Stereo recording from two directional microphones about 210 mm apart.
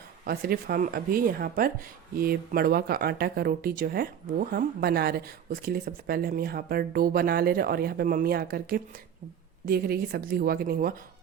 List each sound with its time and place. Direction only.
0.3 s speech: 45° right (ahead or behind)